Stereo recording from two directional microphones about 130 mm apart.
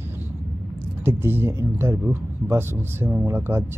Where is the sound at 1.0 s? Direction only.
15° right (ahead or behind).